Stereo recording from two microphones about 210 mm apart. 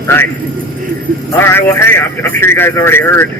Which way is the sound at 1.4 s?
10° left (ahead or behind).